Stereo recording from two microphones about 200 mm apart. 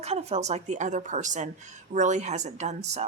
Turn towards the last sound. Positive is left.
turn(degrees=-35)  # may be behind; listen again after turning